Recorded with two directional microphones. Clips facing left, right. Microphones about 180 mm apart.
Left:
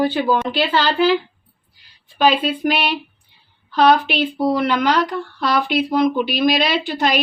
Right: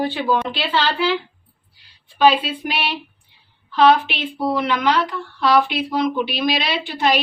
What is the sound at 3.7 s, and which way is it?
Speech, 40° left (ahead or behind).